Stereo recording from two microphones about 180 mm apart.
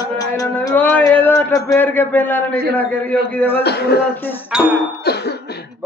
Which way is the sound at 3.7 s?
65° left (ahead or behind).